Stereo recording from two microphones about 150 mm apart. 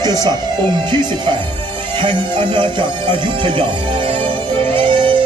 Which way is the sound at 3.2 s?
35° right (ahead or behind).